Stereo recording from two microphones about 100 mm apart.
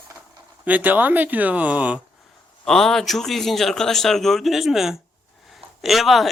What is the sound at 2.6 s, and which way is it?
A man's voice, 5° left (ahead or behind).